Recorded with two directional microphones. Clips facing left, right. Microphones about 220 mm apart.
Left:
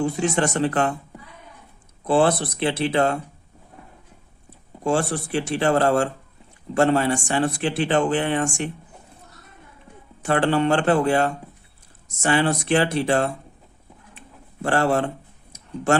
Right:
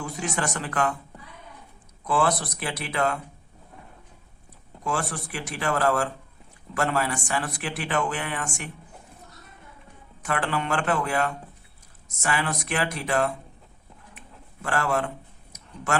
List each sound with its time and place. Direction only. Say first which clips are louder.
0.0 s a man's voice: left 8 dB; 30° left (ahead or behind)
2.0 s a man's voice: left 6 dB; 30° left (ahead or behind)
4.8 s a man's voice: left 7 dB; 30° left (ahead or behind)
10.2 s a man's voice: left 8 dB; 30° left (ahead or behind)
14.2 s a sound: left 10 dB; 30° left (ahead or behind)